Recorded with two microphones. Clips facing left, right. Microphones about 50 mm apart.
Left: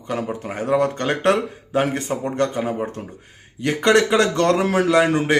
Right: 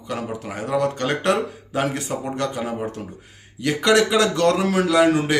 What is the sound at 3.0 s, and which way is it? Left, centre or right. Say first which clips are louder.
Speech: even; centre.